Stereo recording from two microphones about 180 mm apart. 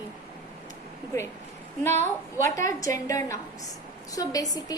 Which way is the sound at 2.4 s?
15° left (ahead or behind).